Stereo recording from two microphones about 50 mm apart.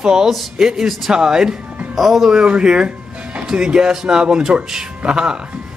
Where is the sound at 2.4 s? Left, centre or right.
Centre.